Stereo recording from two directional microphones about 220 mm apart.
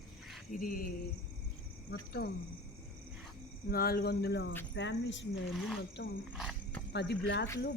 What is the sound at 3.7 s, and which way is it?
Speech, 45° left (ahead or behind).